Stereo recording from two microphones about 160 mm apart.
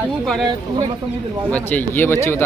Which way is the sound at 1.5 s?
10° left (ahead or behind).